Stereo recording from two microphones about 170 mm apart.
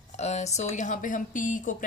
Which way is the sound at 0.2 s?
40° left (ahead or behind).